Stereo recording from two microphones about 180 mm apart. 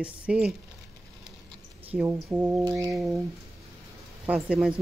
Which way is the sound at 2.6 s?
25° right (ahead or behind).